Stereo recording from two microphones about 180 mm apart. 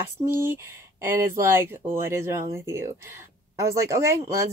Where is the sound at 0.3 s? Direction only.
10° right (ahead or behind).